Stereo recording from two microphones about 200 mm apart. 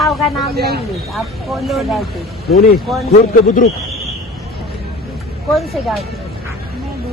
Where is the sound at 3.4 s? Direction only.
45° left (ahead or behind).